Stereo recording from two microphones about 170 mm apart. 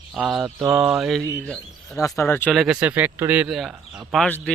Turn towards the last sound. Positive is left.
turn(degrees=5)  # may be behind; listen again after turning